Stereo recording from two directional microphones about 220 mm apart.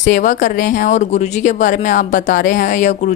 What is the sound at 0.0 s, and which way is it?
A woman's voice, 35° left (ahead or behind).